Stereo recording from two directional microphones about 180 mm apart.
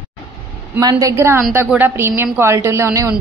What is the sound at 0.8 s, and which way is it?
A woman's voice, 20° right (ahead or behind).